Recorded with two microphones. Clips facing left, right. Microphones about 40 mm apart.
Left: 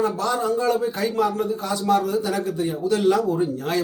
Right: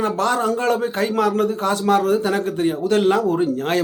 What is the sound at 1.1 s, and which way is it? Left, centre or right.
A man's voice, right.